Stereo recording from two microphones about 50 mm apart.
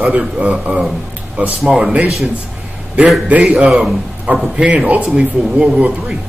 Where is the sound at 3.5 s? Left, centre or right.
Centre.